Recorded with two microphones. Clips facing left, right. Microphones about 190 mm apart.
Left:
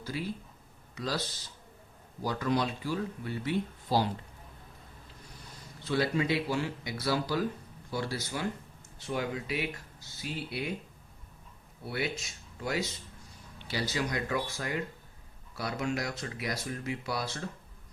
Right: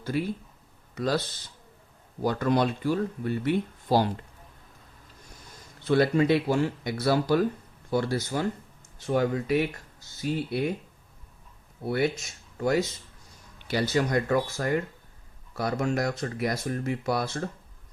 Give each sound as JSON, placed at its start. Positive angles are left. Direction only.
{"t": 0.1, "sound": "speech", "side_deg": -60}
{"t": 2.2, "sound": "speech", "side_deg": -55}
{"t": 5.9, "sound": "speech", "side_deg": -55}
{"t": 12.5, "sound": "speech", "side_deg": -45}